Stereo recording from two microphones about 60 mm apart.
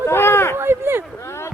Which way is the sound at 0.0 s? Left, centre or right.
Left.